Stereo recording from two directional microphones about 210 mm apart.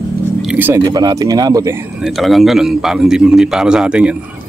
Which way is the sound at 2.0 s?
Centre (ahead or behind).